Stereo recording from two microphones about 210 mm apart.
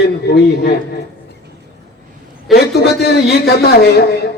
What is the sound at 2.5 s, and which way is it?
A man's voice, 50° left (ahead or behind).